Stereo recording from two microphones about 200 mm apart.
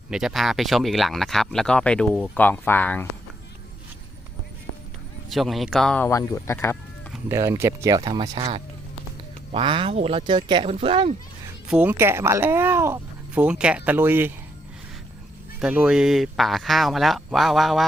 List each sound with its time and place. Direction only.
0.1 s speech: 5° right (ahead or behind)
5.3 s speech: centre (ahead or behind)
7.3 s speech: 15° right (ahead or behind)
9.5 s speech: 25° right (ahead or behind)
11.7 s speech: 10° right (ahead or behind)
15.6 s speech: 5° right (ahead or behind)